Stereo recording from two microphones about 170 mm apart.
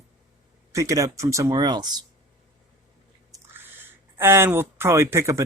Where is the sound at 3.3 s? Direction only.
15° right (ahead or behind).